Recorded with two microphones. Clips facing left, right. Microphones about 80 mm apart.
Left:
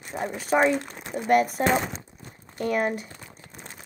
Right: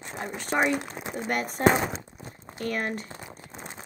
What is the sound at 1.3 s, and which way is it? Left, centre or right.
Speech, centre.